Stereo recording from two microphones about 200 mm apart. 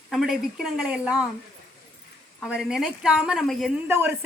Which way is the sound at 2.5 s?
5° right (ahead or behind).